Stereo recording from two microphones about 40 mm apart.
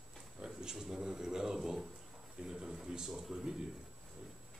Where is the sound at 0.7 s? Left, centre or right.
Centre.